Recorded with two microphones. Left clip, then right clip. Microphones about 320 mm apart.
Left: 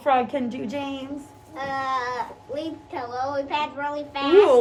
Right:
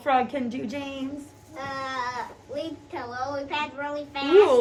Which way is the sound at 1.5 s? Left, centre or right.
Left.